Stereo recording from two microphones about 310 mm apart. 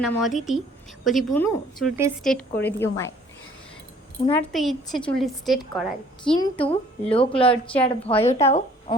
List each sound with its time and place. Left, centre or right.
0.0 s a woman's voice: centre
4.3 s a woman's voice: centre
6.3 s a woman's voice: centre